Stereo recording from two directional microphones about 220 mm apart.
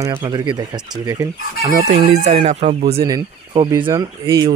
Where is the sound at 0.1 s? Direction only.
20° right (ahead or behind).